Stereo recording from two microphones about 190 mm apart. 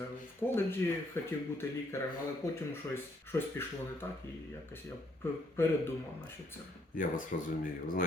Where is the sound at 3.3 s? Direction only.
15° left (ahead or behind).